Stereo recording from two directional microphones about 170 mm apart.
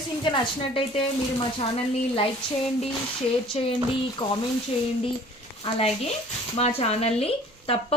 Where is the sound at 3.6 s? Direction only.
35° left (ahead or behind).